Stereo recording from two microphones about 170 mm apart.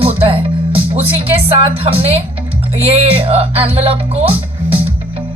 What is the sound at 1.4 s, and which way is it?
Speech, 35° right (ahead or behind).